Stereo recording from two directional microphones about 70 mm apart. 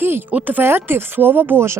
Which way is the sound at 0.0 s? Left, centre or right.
Right.